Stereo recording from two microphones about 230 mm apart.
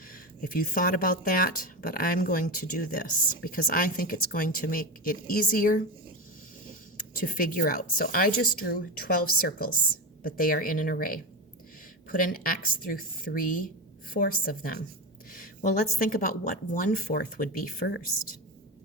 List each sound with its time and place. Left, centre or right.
0.1 s speech: left
6.9 s speech: left